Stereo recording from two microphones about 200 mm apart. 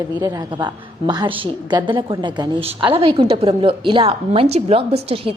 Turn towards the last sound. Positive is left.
turn(degrees=-30)  # may be behind; listen again after turning